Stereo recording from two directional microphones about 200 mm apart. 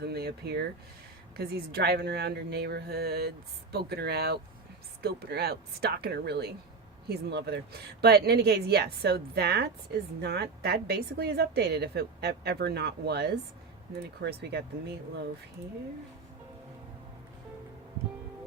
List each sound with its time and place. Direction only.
0.0 s a woman's voice: 55° right (ahead or behind)